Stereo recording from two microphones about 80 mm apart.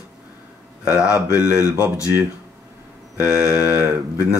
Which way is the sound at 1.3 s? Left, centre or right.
Left.